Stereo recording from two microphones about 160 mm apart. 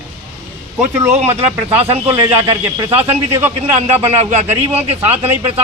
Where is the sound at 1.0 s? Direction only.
45° right (ahead or behind).